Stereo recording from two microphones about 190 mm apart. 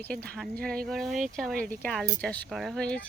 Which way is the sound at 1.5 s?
50° right (ahead or behind).